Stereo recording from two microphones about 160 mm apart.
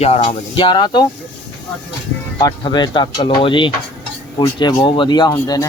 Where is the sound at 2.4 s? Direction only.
25° left (ahead or behind).